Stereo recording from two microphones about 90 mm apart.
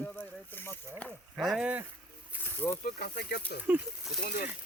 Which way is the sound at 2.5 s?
25° left (ahead or behind).